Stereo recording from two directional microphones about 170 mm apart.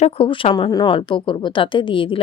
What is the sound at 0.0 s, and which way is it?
A woman's voice, 30° left (ahead or behind).